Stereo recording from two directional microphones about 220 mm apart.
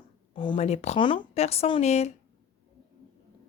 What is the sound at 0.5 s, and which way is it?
A woman's voice, 30° left (ahead or behind).